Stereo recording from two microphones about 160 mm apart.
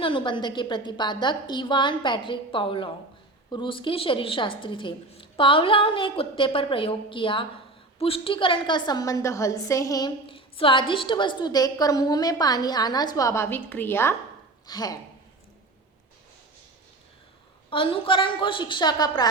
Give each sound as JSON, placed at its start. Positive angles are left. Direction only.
{"t": 0.0, "sound": "a woman's voice", "side_deg": 35}
{"t": 10.2, "sound": "a woman's voice", "side_deg": 35}
{"t": 17.7, "sound": "a woman's voice", "side_deg": 35}